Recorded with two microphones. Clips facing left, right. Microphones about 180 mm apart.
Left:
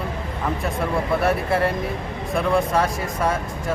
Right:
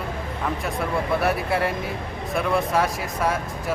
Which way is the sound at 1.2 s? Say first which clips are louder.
Left 2 dB; centre (ahead or behind).